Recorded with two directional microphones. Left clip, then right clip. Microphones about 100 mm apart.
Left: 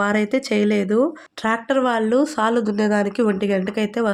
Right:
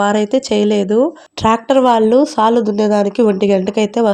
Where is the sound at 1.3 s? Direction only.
45° right (ahead or behind).